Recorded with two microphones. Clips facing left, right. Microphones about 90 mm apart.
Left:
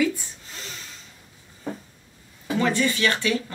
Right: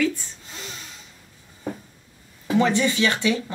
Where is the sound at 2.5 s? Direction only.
20° right (ahead or behind).